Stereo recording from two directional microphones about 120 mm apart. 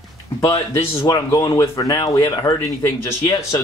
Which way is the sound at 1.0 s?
35° left (ahead or behind).